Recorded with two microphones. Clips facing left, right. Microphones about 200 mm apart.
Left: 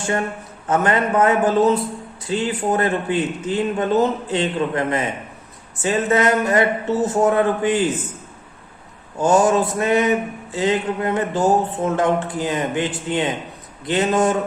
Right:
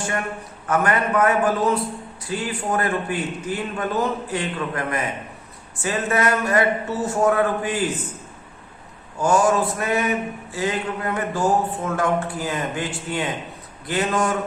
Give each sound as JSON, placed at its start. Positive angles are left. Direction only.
{"t": 0.7, "sound": "a man's voice", "side_deg": 25}
{"t": 9.2, "sound": "a man's voice", "side_deg": 20}